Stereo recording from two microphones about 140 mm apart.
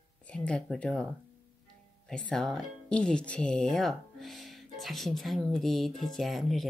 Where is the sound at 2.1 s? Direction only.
5° left (ahead or behind).